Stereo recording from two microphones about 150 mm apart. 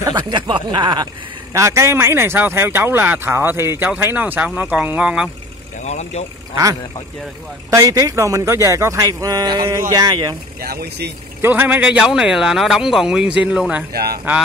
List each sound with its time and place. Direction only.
0.0 s a man's voice: 30° right (ahead or behind); by 5.3 s 5° right (ahead or behind)
5.9 s speech: 50° left (ahead or behind)
7.7 s a man's voice: 25° right (ahead or behind)
10.6 s speech: 90° right
11.4 s a man's voice: 10° right (ahead or behind)
13.9 s speech: 90° right